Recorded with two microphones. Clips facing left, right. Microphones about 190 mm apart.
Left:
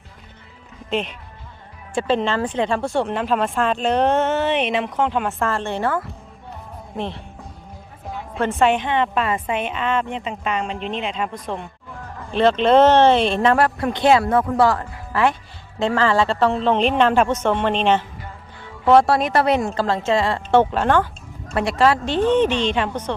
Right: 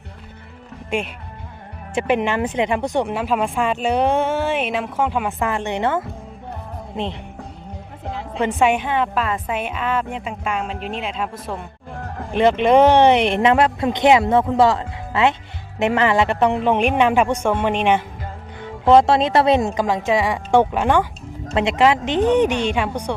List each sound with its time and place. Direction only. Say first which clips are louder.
0.9 s speech: even; 10° right (ahead or behind)
8.4 s a woman's voice: even; 10° right (ahead or behind)
12.1 s a sound: right 2 dB; 55° right (ahead or behind)
12.4 s speech: even; 15° right (ahead or behind)